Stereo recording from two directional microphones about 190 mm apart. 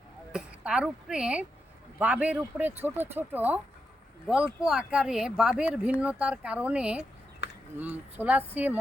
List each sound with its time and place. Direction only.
0.3 s speech: 5° right (ahead or behind)
4.6 s speech: 5° right (ahead or behind)
7.4 s a sound: 70° left (ahead or behind)
7.8 s speech: 10° right (ahead or behind)